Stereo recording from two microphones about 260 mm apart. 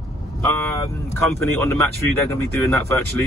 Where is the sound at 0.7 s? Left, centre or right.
Centre.